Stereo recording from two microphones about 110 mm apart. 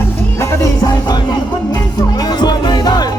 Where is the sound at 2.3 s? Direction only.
40° left (ahead or behind).